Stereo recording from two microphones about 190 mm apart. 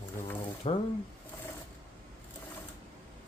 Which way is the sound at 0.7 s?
30° left (ahead or behind).